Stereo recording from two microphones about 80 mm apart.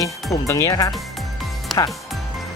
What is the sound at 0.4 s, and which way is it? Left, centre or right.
Speech, left.